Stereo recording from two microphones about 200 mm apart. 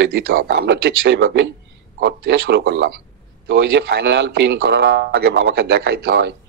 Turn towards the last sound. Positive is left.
turn(degrees=-55)  # may be behind; listen again after turning